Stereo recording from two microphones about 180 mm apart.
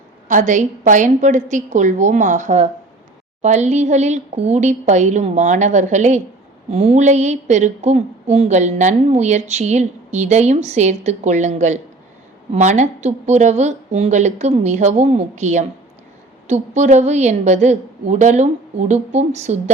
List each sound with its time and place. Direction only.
0.3 s a woman's voice: 45° right (ahead or behind)